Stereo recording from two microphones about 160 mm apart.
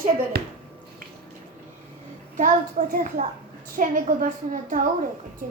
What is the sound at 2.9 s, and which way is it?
A woman's voice, 55° right (ahead or behind).